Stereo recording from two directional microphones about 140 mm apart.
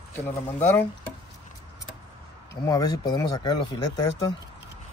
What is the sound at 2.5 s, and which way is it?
Speech, 25° left (ahead or behind).